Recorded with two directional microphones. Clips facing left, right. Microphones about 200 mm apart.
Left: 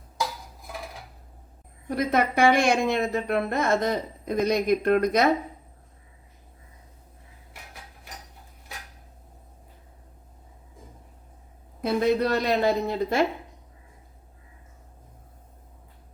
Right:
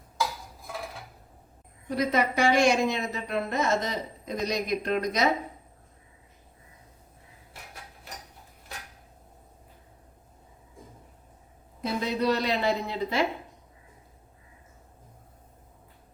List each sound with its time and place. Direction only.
2.0 s a woman's voice: 55° left (ahead or behind)
11.8 s a woman's voice: 55° left (ahead or behind)